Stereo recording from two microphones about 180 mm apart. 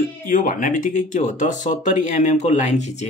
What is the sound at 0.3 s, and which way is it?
Speech, 50° left (ahead or behind).